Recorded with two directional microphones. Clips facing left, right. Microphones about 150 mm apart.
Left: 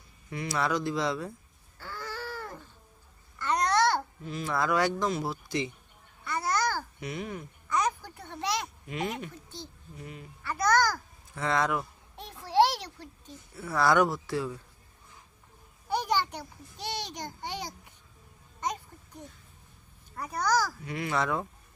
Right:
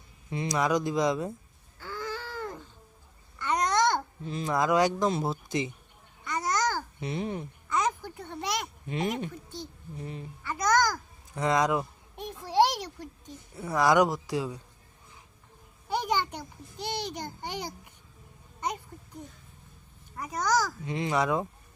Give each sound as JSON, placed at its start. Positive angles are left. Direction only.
{"t": 0.3, "sound": "speech", "side_deg": -20}
{"t": 1.8, "sound": "a sound", "side_deg": -15}
{"t": 3.3, "sound": "babbling", "side_deg": -15}
{"t": 4.5, "sound": "speech", "side_deg": -15}
{"t": 6.2, "sound": "babbling", "side_deg": -15}
{"t": 7.0, "sound": "speech", "side_deg": -25}
{"t": 8.0, "sound": "a sound", "side_deg": -15}
{"t": 8.9, "sound": "speech", "side_deg": -30}
{"t": 10.4, "sound": "babbling", "side_deg": -20}
{"t": 11.3, "sound": "a sound", "side_deg": -15}
{"t": 15.9, "sound": "a sound", "side_deg": -15}
{"t": 20.1, "sound": "a child's voice", "side_deg": -15}